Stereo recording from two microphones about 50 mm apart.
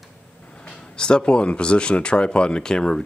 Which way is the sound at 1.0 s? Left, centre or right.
Centre.